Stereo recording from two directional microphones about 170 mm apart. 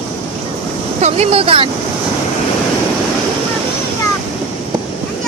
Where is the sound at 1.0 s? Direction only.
40° right (ahead or behind).